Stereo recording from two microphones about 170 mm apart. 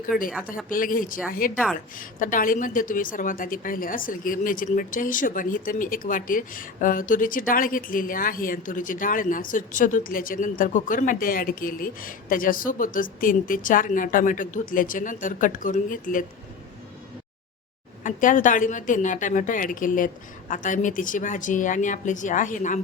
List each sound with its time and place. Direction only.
0.1 s speech: centre (ahead or behind)
0.7 s a woman's voice: 55° left (ahead or behind)
18.0 s a woman's voice: 50° left (ahead or behind)